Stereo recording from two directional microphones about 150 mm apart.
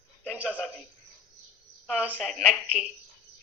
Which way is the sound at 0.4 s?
5° left (ahead or behind).